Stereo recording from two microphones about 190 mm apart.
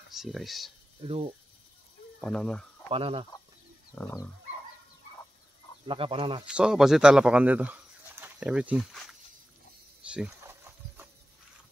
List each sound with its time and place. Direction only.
0.1 s speech: centre (ahead or behind)
1.0 s speech: 30° right (ahead or behind)
2.2 s speech: 5° left (ahead or behind)
2.9 s speech: 30° right (ahead or behind)
3.9 s dog: 15° left (ahead or behind)
5.9 s speech: 30° right (ahead or behind)
6.4 s speech: 5° right (ahead or behind)
10.0 s a sound: 5° right (ahead or behind)